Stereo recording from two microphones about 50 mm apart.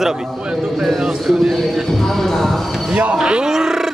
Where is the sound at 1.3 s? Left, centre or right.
Centre.